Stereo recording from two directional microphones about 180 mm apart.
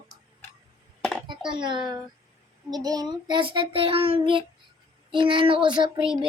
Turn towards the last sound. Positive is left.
turn(degrees=-25)  # may be behind; listen again after turning